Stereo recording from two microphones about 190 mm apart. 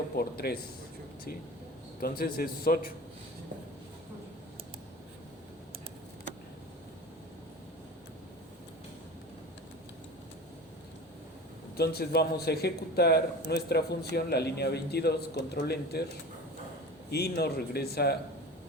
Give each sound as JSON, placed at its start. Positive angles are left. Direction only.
{"t": 0.2, "sound": "a man's voice", "side_deg": 55}
{"t": 2.0, "sound": "a man's voice", "side_deg": 50}
{"t": 11.8, "sound": "a man's voice", "side_deg": 55}
{"t": 17.1, "sound": "a man's voice", "side_deg": 55}